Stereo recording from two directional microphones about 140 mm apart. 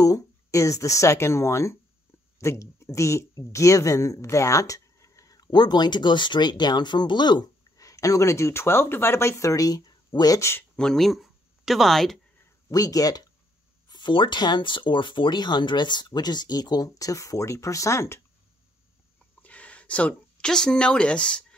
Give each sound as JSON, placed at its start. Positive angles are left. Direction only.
{"t": 0.0, "sound": "speech", "side_deg": 25}
{"t": 10.8, "sound": "speech", "side_deg": 5}
{"t": 12.7, "sound": "speech", "side_deg": 25}
{"t": 19.4, "sound": "speech", "side_deg": 10}